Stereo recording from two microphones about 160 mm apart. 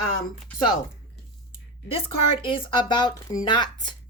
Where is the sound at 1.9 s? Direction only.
35° left (ahead or behind).